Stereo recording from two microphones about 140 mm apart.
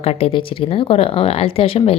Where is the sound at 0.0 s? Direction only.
45° left (ahead or behind).